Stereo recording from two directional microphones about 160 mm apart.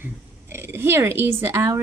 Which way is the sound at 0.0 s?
15° right (ahead or behind).